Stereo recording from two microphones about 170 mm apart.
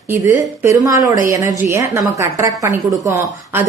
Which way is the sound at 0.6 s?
15° right (ahead or behind).